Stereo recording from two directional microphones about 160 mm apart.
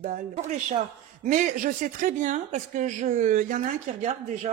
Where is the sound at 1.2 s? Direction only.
55° right (ahead or behind).